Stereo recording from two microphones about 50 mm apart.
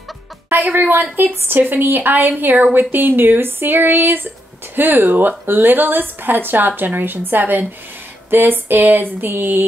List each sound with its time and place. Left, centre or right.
0.5 s a woman's voice: right